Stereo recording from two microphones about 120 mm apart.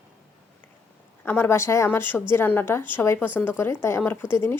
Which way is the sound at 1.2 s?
20° left (ahead or behind).